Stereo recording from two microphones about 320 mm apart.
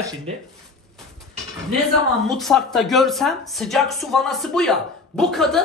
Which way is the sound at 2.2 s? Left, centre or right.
Centre.